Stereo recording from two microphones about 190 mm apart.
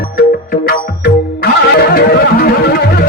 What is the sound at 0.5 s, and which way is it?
Music, 55° left (ahead or behind).